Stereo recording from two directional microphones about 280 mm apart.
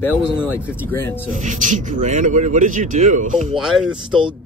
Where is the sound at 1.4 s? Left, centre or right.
Right.